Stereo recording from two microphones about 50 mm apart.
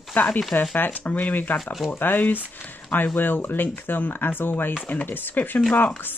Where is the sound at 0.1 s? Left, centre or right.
Left.